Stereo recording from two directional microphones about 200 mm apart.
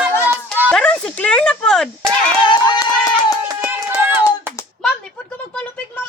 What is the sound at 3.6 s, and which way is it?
Run, 10° right (ahead or behind).